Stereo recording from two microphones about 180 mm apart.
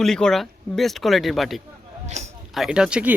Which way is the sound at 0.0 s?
5° left (ahead or behind).